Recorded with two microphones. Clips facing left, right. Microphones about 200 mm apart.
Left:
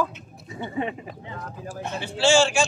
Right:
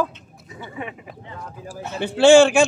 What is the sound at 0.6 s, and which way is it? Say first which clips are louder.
Speech: left 5 dB; 30° left (ahead or behind).